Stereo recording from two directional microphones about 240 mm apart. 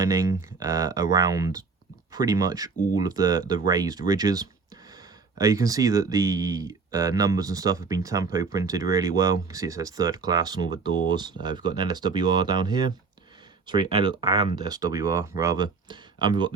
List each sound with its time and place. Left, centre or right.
0.0 s speech: centre